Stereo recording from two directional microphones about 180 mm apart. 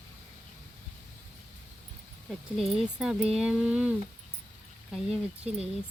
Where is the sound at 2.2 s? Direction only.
Centre (ahead or behind).